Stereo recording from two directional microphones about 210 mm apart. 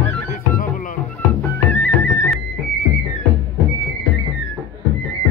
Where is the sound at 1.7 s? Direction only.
10° left (ahead or behind).